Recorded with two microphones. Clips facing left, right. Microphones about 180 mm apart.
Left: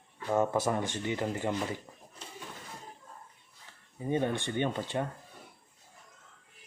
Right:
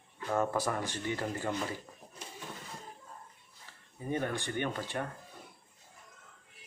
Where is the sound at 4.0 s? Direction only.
20° left (ahead or behind).